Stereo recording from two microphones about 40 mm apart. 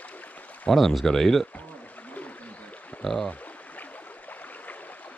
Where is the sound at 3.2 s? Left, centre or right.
Left.